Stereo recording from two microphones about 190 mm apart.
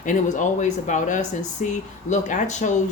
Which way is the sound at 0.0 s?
40° left (ahead or behind).